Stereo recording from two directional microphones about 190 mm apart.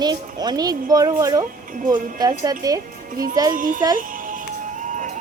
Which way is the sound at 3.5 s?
45° right (ahead or behind).